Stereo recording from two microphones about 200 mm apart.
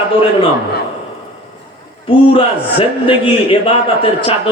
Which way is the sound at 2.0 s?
25° left (ahead or behind).